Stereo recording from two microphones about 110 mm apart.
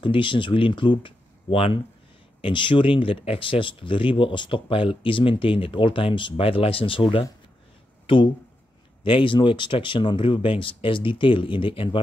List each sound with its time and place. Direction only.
0.0 s speech: 50° left (ahead or behind)